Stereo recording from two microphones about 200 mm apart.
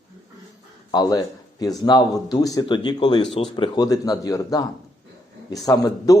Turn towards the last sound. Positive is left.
turn(degrees=20)  # may be behind; listen again after turning